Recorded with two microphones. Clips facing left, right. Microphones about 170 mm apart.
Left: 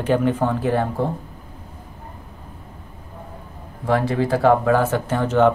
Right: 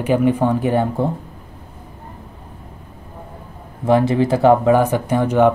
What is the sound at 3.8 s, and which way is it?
Speech, 20° right (ahead or behind).